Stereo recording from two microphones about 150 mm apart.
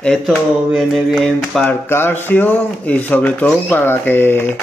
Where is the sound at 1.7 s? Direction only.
15° left (ahead or behind).